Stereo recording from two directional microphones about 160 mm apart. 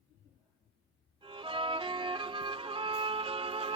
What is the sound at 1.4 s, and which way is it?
Music, 30° right (ahead or behind).